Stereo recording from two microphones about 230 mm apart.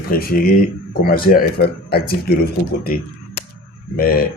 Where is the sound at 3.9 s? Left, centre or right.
Left.